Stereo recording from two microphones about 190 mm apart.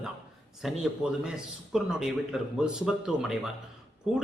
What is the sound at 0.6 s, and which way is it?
Speech, centre (ahead or behind).